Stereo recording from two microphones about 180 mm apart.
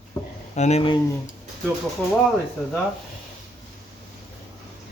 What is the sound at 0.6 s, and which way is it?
Speech, 35° left (ahead or behind).